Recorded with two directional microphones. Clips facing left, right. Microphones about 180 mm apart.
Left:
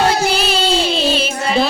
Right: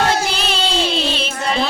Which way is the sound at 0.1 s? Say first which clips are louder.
Left 3 dB; 5° left (ahead or behind).